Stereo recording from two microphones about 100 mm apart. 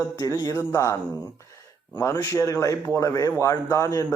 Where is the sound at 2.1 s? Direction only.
35° left (ahead or behind).